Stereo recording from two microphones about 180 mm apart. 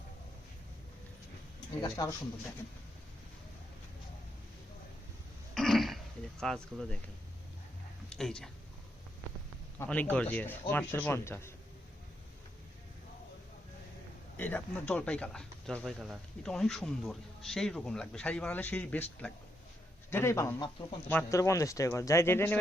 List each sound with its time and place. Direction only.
1.8 s speech: 20° left (ahead or behind)
5.5 s throat clearing: centre (ahead or behind)
6.4 s speech: centre (ahead or behind)
8.1 s speech: 5° left (ahead or behind)
9.7 s speech: 10° left (ahead or behind)
14.3 s speech: 10° left (ahead or behind)